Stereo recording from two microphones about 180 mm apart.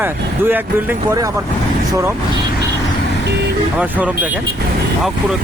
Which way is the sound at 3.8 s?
10° right (ahead or behind).